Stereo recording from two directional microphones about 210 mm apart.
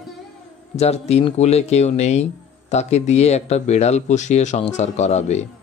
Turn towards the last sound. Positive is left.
turn(degrees=35)  # may be behind; listen again after turning